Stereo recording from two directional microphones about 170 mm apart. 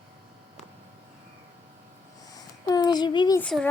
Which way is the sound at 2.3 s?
25° left (ahead or behind).